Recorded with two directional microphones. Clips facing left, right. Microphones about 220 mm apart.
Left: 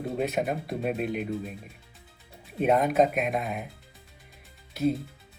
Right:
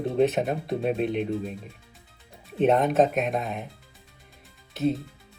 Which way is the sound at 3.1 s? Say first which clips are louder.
Right 2 dB; centre (ahead or behind).